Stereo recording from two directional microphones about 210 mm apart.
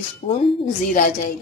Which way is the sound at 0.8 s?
40° left (ahead or behind).